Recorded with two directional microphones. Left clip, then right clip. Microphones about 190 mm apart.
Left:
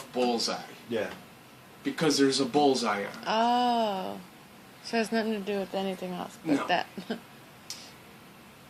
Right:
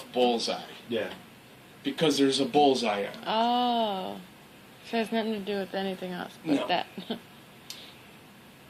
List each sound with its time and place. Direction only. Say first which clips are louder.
0.1 s speech: right 3 dB; 15° left (ahead or behind)
3.2 s speech: left 1 dB; 45° left (ahead or behind)